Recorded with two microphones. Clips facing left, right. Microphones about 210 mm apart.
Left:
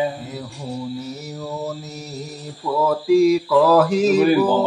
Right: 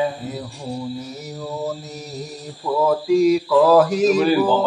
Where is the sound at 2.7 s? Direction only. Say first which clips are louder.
Right 1 dB; 15° right (ahead or behind).